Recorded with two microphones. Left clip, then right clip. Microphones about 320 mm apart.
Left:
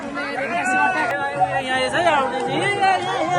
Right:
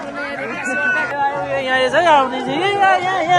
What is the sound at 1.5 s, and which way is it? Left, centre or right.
Chatter, right.